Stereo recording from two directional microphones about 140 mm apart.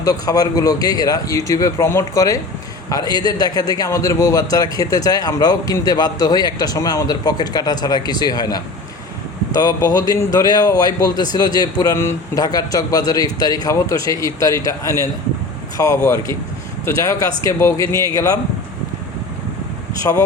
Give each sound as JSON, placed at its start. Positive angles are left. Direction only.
{"t": 0.0, "sound": "a man's voice", "side_deg": 25}
{"t": 20.0, "sound": "a man's voice", "side_deg": 25}